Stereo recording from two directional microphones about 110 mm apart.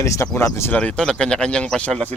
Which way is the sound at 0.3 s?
25° left (ahead or behind).